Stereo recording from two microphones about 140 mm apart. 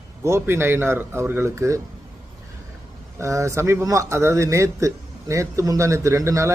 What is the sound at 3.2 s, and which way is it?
Speech, 20° right (ahead or behind).